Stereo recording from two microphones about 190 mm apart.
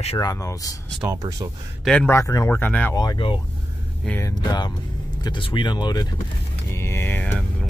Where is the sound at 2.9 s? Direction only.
20° left (ahead or behind).